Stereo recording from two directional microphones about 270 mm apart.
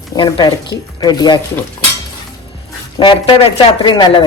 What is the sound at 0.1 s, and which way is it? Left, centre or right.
Speech, centre.